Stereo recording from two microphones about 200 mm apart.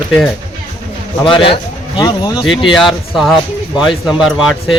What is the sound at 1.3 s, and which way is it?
Speech, 25° left (ahead or behind).